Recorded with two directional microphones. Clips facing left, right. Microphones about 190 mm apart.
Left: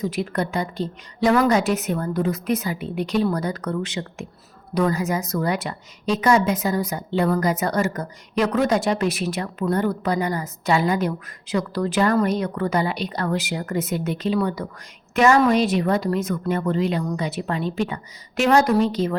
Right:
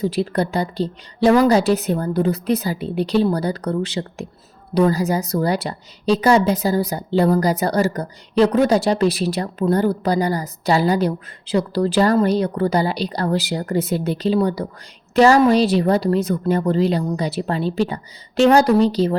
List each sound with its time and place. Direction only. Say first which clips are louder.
0.0 s a woman's voice: right 4 dB; 30° right (ahead or behind)